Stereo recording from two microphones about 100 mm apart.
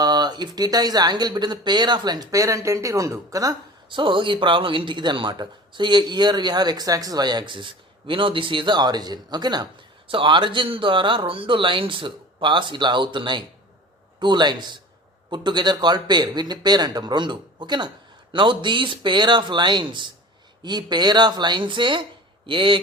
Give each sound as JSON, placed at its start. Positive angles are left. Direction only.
{"t": 0.0, "sound": "a man's voice", "side_deg": -45}
{"t": 3.8, "sound": "a man's voice", "side_deg": -55}
{"t": 10.1, "sound": "a man's voice", "side_deg": -55}